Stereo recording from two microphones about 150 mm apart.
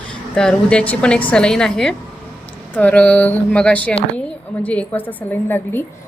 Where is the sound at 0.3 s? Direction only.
5° left (ahead or behind).